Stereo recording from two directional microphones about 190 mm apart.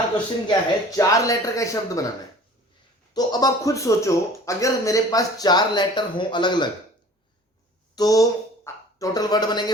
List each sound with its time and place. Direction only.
0.4 s speech: 15° left (ahead or behind)
3.1 s a man's voice: 20° left (ahead or behind)
7.9 s speech: 20° left (ahead or behind)